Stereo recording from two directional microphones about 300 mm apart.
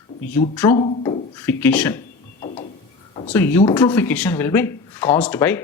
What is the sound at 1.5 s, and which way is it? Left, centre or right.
Speech, centre.